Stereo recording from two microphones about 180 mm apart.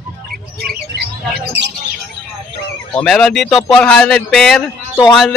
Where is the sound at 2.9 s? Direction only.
5° left (ahead or behind).